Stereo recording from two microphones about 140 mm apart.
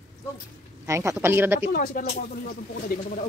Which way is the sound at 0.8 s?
20° right (ahead or behind).